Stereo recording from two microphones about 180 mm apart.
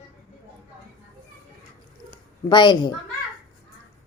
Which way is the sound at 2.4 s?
25° left (ahead or behind).